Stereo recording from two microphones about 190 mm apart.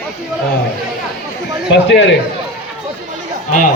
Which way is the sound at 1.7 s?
70° left (ahead or behind).